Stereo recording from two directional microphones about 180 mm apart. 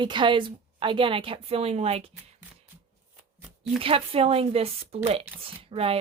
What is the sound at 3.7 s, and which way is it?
Speech, 30° right (ahead or behind).